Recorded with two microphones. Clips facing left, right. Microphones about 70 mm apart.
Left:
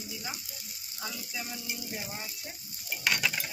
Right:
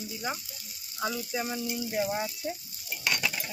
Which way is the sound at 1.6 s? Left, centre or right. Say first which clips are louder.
Right 9 dB; right.